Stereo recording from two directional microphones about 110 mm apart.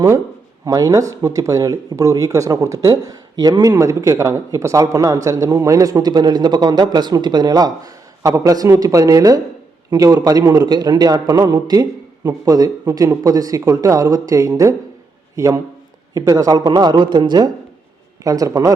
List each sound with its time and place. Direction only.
0.6 s a man's voice: 35° right (ahead or behind)
18.2 s speech: 30° right (ahead or behind)